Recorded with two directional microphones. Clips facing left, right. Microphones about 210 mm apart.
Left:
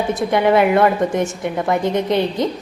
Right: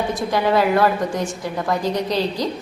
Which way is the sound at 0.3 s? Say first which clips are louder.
Left 4 dB; 20° left (ahead or behind).